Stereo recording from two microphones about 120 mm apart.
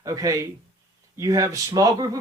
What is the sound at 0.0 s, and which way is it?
Speech, 30° right (ahead or behind).